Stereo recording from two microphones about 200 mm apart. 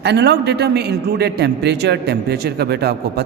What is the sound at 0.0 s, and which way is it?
A man's voice, 55° right (ahead or behind).